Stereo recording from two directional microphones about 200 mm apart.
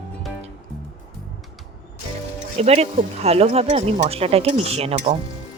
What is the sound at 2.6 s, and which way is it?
Speech, 30° right (ahead or behind).